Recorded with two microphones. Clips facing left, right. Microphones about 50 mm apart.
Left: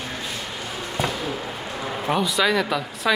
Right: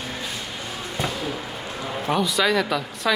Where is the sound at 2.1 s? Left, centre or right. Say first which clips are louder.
Even; centre.